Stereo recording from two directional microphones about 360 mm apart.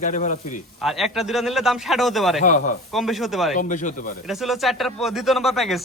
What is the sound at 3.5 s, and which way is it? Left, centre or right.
Speech, left.